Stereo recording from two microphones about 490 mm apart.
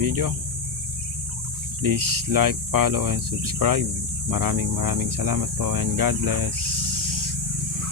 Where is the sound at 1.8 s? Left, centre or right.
Right.